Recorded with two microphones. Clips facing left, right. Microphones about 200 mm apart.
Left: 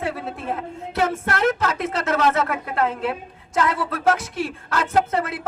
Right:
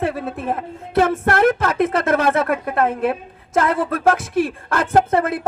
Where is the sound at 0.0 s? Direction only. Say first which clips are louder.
Right 5 dB; 55° right (ahead or behind).